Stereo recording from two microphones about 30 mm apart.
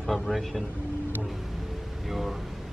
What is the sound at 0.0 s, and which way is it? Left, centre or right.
Speech, centre.